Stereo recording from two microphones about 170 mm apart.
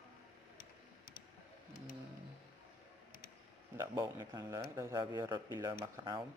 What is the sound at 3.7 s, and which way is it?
Speech, 15° right (ahead or behind).